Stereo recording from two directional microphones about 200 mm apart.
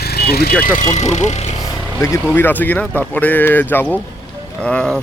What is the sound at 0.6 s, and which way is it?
Speech, 40° left (ahead or behind).